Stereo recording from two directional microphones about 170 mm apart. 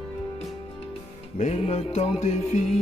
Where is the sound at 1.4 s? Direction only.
40° left (ahead or behind).